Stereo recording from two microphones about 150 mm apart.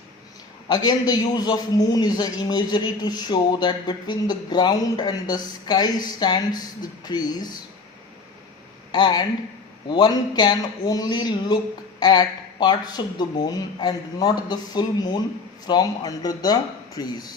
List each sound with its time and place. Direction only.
0.7 s a man's voice: 25° left (ahead or behind)
8.9 s a woman's voice: 30° left (ahead or behind)